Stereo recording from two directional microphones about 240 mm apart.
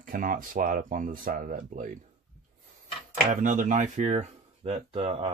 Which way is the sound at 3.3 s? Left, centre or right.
Right.